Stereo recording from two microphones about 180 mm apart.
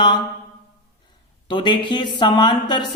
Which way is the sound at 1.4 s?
25° left (ahead or behind).